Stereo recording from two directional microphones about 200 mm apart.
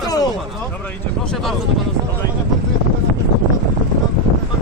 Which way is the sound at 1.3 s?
Centre (ahead or behind).